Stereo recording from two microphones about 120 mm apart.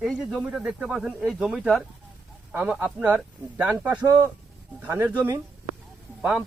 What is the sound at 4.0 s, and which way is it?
Speech, 25° right (ahead or behind).